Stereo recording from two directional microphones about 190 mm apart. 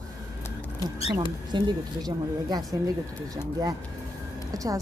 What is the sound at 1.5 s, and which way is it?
Speech, 25° right (ahead or behind).